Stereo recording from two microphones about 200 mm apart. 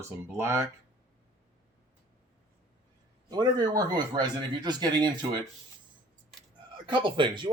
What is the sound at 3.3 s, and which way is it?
Speech, 20° right (ahead or behind).